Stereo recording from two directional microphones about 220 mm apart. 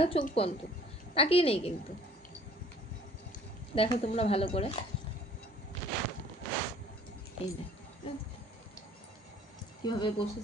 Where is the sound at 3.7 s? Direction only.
25° left (ahead or behind).